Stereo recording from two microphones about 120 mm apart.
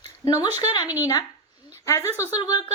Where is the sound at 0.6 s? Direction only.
35° left (ahead or behind).